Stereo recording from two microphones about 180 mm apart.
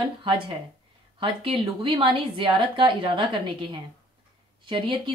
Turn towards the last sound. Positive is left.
turn(degrees=-30)  # may be behind; listen again after turning